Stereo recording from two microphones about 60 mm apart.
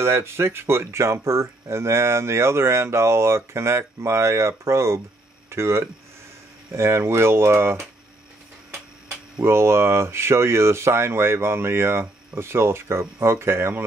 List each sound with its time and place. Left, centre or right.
0.0 s speech: right
9.4 s speech: right